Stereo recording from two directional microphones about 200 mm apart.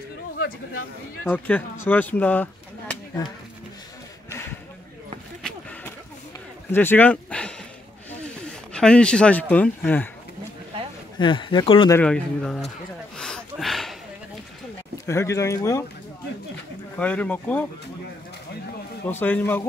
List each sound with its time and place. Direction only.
1.2 s speech: 10° left (ahead or behind)
5.4 s a sound: 5° left (ahead or behind)
6.7 s speech: 10° left (ahead or behind)
8.7 s speech: 5° left (ahead or behind)
11.1 s speech: 25° left (ahead or behind)
11.9 s speech: 5° left (ahead or behind)
13.2 s a sound: centre (ahead or behind)
15.0 s speech: 15° left (ahead or behind)
16.9 s speech: 5° left (ahead or behind)
19.0 s speech: 10° left (ahead or behind)